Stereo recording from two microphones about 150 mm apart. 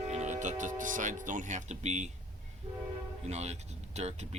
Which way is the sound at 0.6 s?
60° right (ahead or behind).